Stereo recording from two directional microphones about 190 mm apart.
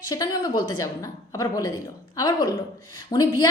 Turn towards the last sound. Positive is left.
turn(degrees=20)  # may be behind; listen again after turning